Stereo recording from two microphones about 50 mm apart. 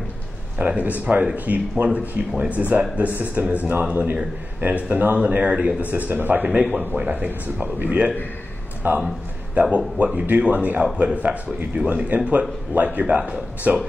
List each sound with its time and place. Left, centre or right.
0.6 s speech: right
6.4 s speech: right
10.1 s speech: right
11.9 s speech: right